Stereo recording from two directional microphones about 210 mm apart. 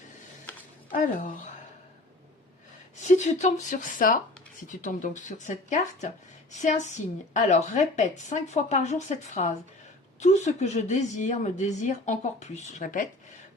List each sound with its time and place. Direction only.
0.5 s a sound: 5° left (ahead or behind)
0.9 s a woman's voice: 40° left (ahead or behind)
3.0 s a woman's voice: 35° left (ahead or behind)